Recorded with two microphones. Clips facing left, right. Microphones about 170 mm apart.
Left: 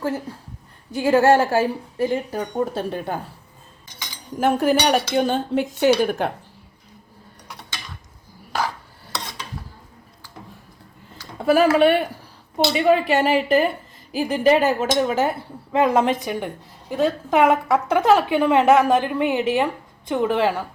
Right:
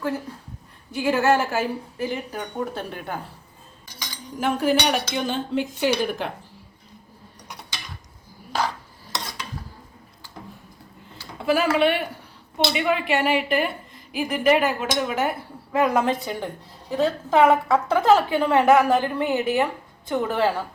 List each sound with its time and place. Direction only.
0.9 s a woman's voice: 40° left (ahead or behind)
4.4 s speech: 45° left (ahead or behind)
11.3 s a woman's voice: 40° left (ahead or behind)
15.7 s a woman's voice: 25° left (ahead or behind)